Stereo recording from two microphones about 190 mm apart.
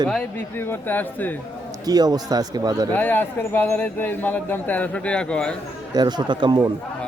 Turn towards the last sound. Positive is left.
turn(degrees=-25)  # may be behind; listen again after turning